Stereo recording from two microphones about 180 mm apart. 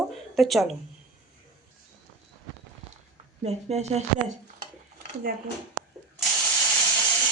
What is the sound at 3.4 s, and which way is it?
Speech, 35° right (ahead or behind).